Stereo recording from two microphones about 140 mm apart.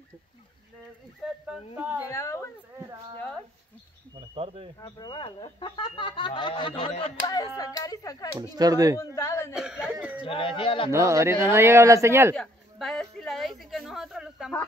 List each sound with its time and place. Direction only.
1.2 s speech: centre (ahead or behind)
2.0 s speech: 20° left (ahead or behind)
4.4 s speech: 45° right (ahead or behind)
4.7 s speech: 25° left (ahead or behind); by 7.2 s 40° left (ahead or behind)
7.2 s speech: 25° left (ahead or behind)
8.4 s speech: 25° right (ahead or behind)
9.0 s speech: 20° left (ahead or behind)
9.5 s speech: 5° right (ahead or behind)
10.2 s speech: 40° left (ahead or behind)
10.9 s speech: 20° right (ahead or behind)
12.4 s a sound: centre (ahead or behind)